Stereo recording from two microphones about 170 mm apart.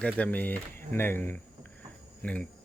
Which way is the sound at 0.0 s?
10° left (ahead or behind).